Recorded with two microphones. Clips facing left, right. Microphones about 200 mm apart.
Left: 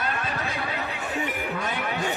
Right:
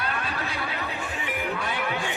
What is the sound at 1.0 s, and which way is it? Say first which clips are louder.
Chatter: left 2 dB; 40° left (ahead or behind).